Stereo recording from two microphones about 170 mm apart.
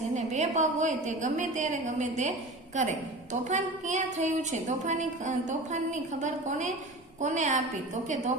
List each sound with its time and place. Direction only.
0.1 s a woman's voice: 45° right (ahead or behind)
3.4 s a woman's voice: 45° right (ahead or behind)